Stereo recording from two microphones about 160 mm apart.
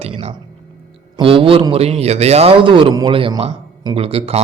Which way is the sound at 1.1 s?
35° right (ahead or behind).